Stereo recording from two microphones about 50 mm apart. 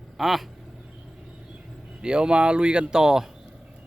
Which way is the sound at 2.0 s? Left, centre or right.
Centre.